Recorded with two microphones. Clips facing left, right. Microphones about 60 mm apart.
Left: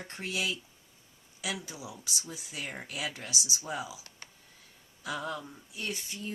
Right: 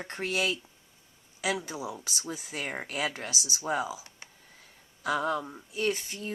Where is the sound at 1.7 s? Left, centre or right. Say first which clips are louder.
Right 7 dB; right.